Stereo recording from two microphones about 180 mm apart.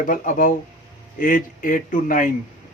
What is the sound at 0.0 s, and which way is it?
Speech, 50° left (ahead or behind).